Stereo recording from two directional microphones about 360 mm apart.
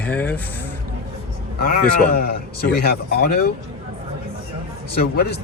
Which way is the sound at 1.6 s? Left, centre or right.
Left.